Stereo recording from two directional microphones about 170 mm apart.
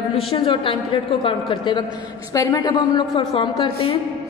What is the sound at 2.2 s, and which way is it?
A woman's voice, 20° left (ahead or behind).